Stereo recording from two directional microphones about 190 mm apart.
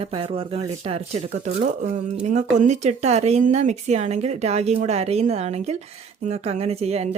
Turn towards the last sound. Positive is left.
turn(degrees=-35)  # may be behind; listen again after turning